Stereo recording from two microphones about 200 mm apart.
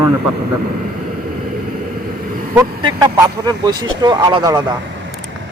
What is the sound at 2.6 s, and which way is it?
Speech, 20° right (ahead or behind).